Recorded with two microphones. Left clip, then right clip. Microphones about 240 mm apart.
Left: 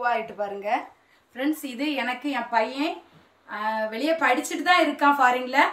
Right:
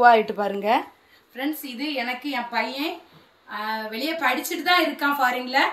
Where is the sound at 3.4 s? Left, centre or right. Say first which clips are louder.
Left 2 dB; centre.